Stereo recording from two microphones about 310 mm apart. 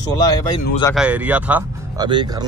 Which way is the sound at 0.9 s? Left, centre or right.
Centre.